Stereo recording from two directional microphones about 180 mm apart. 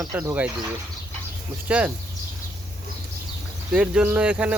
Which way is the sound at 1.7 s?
10° right (ahead or behind).